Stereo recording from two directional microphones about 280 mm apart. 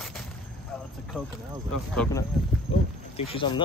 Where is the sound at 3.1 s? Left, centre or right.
Centre.